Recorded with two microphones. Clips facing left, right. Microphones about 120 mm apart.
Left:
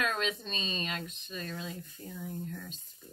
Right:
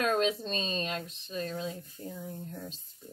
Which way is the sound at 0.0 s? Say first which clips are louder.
Right 5 dB; 40° right (ahead or behind).